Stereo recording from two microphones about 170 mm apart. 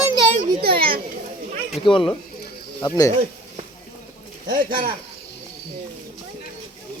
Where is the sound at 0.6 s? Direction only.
60° right (ahead or behind).